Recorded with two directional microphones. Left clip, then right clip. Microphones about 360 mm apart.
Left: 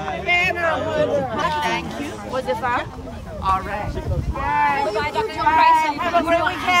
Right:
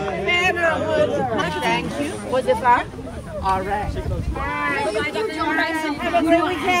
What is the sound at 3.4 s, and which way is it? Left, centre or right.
Speech, centre.